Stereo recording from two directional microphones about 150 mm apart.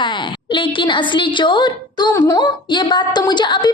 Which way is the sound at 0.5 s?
35° left (ahead or behind).